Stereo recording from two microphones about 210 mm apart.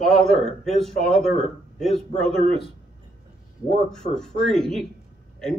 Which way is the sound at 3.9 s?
5° left (ahead or behind).